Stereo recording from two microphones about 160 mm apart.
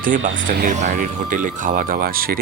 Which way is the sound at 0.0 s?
55° right (ahead or behind).